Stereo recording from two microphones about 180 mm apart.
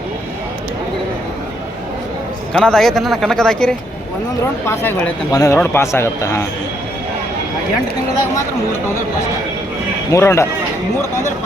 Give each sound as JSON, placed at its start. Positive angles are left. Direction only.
{"t": 2.5, "sound": "speech", "side_deg": 5}
{"t": 10.1, "sound": "speech", "side_deg": 15}